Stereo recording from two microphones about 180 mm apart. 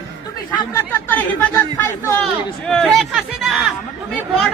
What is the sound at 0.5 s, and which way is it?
Speech, 25° left (ahead or behind).